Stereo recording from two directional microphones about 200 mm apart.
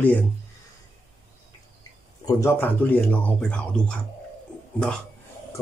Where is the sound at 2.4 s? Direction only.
10° left (ahead or behind).